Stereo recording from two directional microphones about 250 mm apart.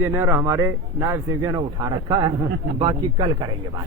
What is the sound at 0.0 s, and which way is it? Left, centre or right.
Speech, centre.